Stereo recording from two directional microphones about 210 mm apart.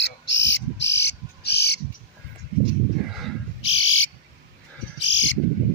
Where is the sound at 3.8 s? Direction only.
65° left (ahead or behind).